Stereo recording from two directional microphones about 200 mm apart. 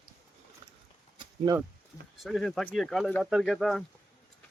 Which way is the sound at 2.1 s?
Centre (ahead or behind).